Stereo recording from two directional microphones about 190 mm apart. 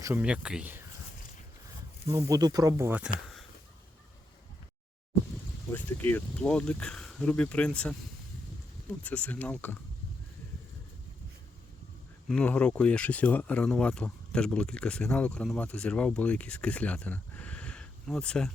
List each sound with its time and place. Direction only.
0.0 s speech: 10° right (ahead or behind)
2.0 s speech: 15° right (ahead or behind)
5.7 s speech: 10° left (ahead or behind)
12.3 s speech: 5° left (ahead or behind)